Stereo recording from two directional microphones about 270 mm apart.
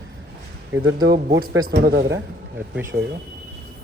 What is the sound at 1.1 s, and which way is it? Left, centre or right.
A man's voice, right.